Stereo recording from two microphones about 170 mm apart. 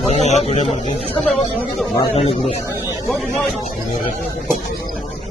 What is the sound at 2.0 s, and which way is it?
Speech, 35° left (ahead or behind).